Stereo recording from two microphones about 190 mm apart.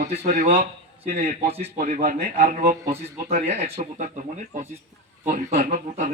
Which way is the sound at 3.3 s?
40° right (ahead or behind).